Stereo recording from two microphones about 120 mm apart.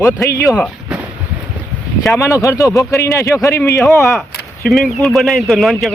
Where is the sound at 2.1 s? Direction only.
25° left (ahead or behind).